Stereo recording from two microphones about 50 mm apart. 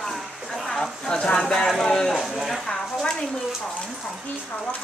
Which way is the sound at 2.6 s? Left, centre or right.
Centre.